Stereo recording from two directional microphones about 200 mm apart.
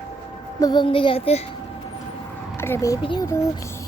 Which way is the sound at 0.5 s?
20° left (ahead or behind).